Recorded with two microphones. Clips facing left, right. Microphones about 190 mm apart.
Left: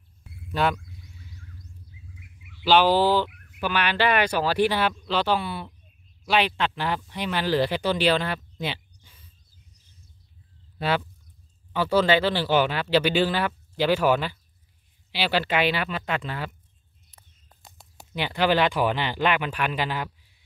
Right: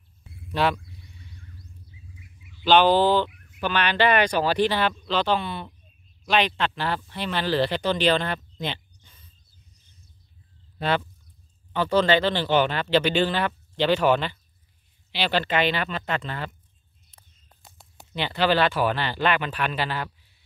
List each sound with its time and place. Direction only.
0.6 s speech: centre (ahead or behind)
1.0 s music: centre (ahead or behind)
2.1 s bird: 65° left (ahead or behind)
2.6 s speech: 5° left (ahead or behind)
10.8 s speech: 5° left (ahead or behind)
18.1 s speech: 10° left (ahead or behind)